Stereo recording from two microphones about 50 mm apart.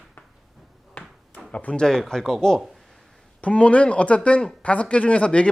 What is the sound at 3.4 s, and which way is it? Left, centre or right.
Speech, left.